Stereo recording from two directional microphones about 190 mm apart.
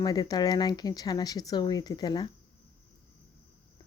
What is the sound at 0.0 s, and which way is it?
Speech, 20° left (ahead or behind).